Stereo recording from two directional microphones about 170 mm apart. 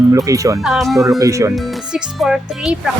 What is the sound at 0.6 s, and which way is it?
Speech, centre (ahead or behind).